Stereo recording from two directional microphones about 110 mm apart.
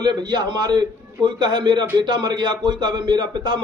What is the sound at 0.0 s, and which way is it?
A man's voice, 40° right (ahead or behind).